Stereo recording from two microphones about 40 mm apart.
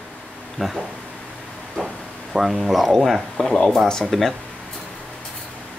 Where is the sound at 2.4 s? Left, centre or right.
Centre.